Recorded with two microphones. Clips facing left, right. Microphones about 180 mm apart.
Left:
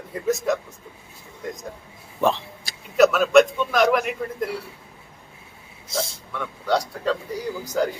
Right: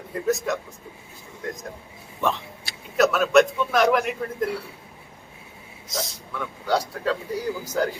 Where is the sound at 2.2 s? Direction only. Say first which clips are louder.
Left 4 dB; 30° left (ahead or behind).